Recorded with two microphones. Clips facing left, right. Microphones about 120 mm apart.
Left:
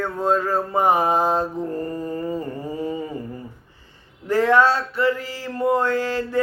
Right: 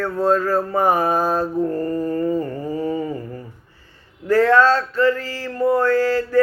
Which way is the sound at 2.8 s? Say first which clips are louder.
Right 4 dB; 40° right (ahead or behind).